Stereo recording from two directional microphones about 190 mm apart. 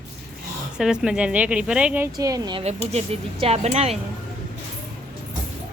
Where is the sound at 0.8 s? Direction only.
5° right (ahead or behind).